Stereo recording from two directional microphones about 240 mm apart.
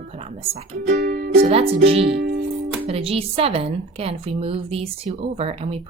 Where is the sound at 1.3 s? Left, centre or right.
Right.